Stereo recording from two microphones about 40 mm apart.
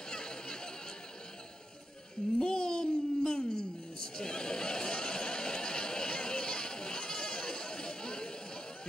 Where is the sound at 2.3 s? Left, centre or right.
Left.